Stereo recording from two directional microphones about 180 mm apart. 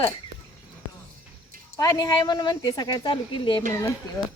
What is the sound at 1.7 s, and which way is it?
Speech, 15° left (ahead or behind).